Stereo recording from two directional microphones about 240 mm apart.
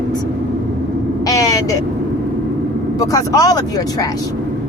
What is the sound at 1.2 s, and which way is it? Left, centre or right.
Vehicle, centre.